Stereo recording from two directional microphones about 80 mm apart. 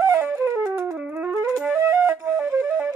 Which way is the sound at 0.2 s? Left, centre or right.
Right.